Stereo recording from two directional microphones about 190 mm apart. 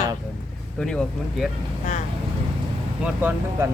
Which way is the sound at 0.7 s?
5° left (ahead or behind).